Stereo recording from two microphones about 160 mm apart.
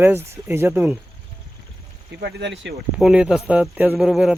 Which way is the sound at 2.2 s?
90° right.